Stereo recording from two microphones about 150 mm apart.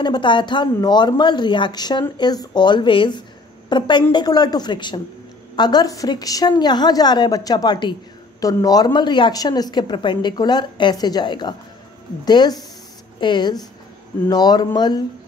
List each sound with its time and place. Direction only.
0.0 s a woman's voice: 30° left (ahead or behind)